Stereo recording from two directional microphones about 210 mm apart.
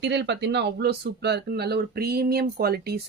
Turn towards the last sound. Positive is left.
turn(degrees=-50)  # may be behind; listen again after turning